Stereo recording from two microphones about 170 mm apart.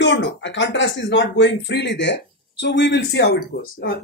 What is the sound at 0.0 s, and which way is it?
Speech, 90° left.